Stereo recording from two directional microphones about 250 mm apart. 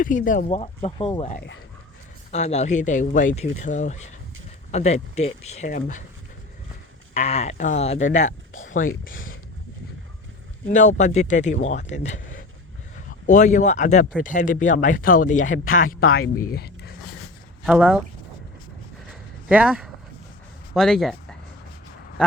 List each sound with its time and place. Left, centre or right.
0.0 s speech: left
7.1 s speech: left
10.7 s speech: left
15.5 s speech: left
16.3 s speech: left
17.7 s speech: centre
19.5 s speech: centre